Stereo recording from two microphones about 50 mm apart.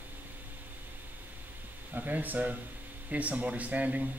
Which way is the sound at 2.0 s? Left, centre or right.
Right.